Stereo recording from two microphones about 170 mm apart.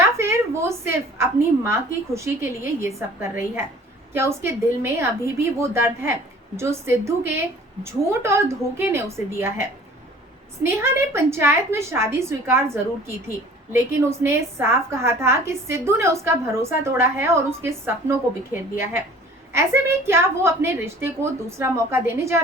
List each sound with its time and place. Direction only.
0.0 s a woman's voice: 15° right (ahead or behind)